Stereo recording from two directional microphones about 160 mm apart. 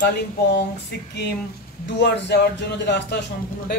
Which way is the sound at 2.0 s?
90° left.